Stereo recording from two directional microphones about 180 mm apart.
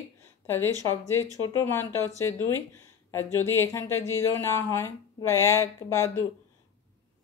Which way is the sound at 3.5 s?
15° left (ahead or behind).